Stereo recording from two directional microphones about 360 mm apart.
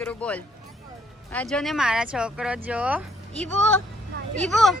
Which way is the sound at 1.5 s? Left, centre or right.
Centre.